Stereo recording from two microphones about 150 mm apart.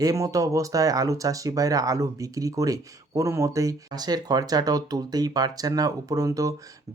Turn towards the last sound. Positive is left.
turn(degrees=-20)  # may be behind; listen again after turning